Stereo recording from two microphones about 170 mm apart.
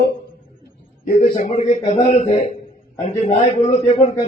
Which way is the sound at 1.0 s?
55° left (ahead or behind).